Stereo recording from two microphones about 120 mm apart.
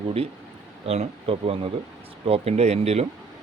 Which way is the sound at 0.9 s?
55° right (ahead or behind).